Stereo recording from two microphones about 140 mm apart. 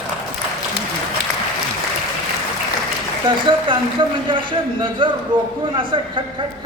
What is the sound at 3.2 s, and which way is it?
Speech, 35° right (ahead or behind).